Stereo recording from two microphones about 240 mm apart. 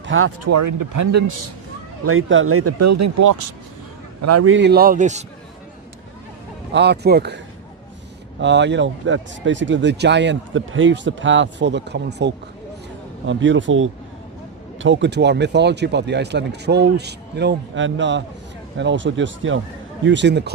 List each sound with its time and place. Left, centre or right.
0.0 s speech: right
2.0 s speech: right
4.2 s a man's voice: right
4.5 s speech: right
6.7 s speech: right
8.4 s speech: right